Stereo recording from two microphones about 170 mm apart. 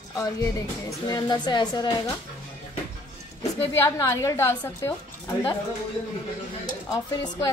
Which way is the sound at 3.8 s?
15° left (ahead or behind).